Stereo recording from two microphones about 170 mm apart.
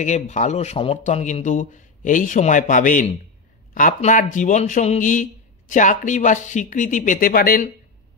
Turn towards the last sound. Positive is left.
turn(degrees=60)  # may be behind; listen again after turning